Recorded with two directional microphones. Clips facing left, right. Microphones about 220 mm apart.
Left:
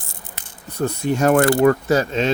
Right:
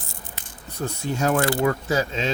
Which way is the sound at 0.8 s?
60° left (ahead or behind).